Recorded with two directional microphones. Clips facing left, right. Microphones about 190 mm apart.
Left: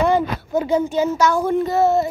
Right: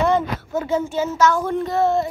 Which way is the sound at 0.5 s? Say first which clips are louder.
Left 4 dB; 15° left (ahead or behind).